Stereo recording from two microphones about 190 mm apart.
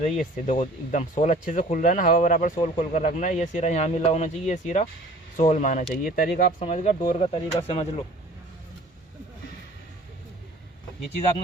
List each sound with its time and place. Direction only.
0.0 s speech: 45° left (ahead or behind)
6.6 s speech: 35° left (ahead or behind)